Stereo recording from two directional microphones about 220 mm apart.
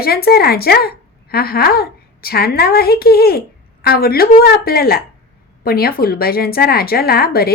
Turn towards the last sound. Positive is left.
turn(degrees=45)  # may be behind; listen again after turning